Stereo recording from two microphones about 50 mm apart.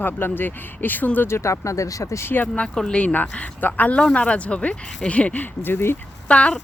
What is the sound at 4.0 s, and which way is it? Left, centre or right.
Speech, left.